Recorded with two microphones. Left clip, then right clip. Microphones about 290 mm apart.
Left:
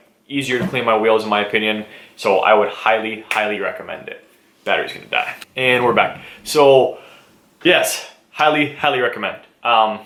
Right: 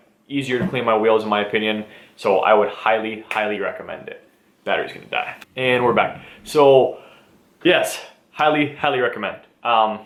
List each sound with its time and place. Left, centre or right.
0.3 s speech: centre